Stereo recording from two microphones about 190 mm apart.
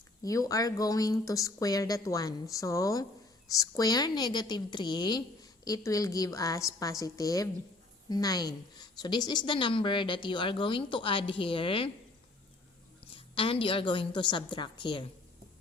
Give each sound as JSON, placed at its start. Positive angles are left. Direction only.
{"t": 0.2, "sound": "a woman's voice", "side_deg": 15}
{"t": 13.1, "sound": "speech", "side_deg": 30}